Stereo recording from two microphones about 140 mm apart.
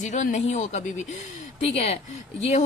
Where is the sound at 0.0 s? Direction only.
60° left (ahead or behind).